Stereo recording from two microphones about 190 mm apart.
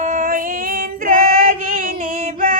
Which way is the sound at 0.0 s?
40° right (ahead or behind).